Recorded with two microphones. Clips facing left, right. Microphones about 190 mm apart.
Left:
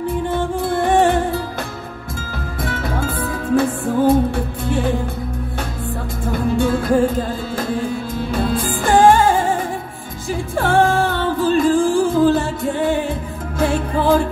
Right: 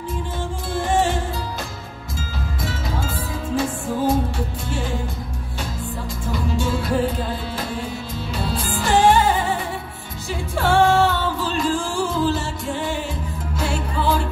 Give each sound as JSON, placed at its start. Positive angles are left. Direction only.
{"t": 0.3, "sound": "music", "side_deg": 60}
{"t": 2.6, "sound": "music", "side_deg": 55}
{"t": 6.2, "sound": "music", "side_deg": 55}